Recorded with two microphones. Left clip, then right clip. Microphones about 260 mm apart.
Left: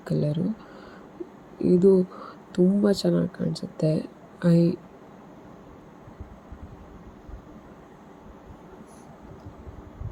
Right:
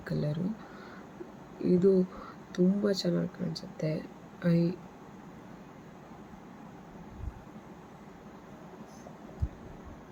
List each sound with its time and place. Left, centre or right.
0.0 s speech: centre
1.6 s speech: centre